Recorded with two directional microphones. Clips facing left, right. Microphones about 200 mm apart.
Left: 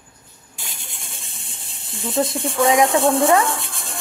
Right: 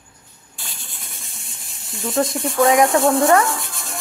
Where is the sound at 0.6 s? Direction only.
20° left (ahead or behind).